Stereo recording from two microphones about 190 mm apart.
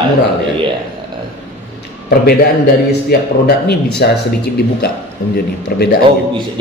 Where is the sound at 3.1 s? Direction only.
55° left (ahead or behind).